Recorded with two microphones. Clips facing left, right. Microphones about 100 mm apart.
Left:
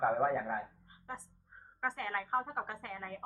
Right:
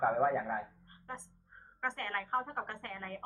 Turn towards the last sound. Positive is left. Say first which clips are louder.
# even
turn(degrees=5)  # may be behind; listen again after turning